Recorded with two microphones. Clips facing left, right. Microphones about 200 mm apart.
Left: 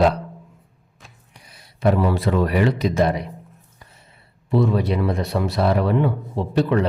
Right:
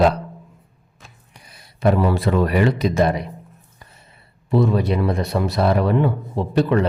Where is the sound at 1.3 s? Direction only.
50° right (ahead or behind).